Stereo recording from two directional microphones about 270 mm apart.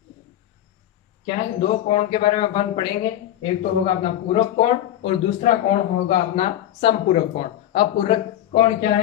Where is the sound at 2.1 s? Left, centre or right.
Centre.